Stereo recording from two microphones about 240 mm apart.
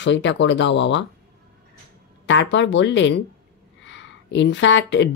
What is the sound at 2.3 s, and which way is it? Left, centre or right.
Speech, left.